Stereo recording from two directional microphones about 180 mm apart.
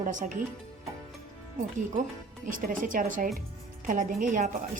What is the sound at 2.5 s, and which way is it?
A woman's voice, 50° right (ahead or behind).